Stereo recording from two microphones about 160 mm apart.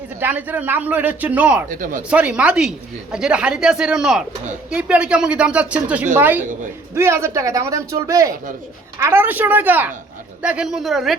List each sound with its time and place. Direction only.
0.2 s a man's voice: 10° right (ahead or behind)
6.4 s a woman's voice: 55° right (ahead or behind)
6.9 s a man's voice: 15° right (ahead or behind); by 11.2 s centre (ahead or behind)